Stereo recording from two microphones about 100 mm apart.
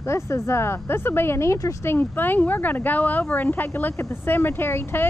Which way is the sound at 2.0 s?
20° left (ahead or behind).